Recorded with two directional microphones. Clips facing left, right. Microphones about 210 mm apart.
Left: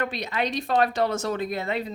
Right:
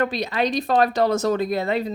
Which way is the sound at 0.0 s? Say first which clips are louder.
Right 5 dB; 35° right (ahead or behind).